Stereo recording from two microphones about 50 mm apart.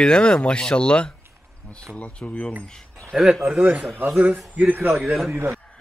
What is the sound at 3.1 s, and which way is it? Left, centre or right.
Speech, centre.